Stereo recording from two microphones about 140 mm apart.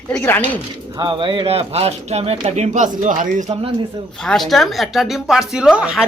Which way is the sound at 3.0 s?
70° right (ahead or behind).